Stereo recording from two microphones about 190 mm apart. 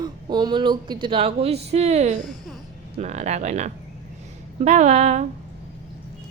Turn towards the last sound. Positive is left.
turn(degrees=-35)  # may be behind; listen again after turning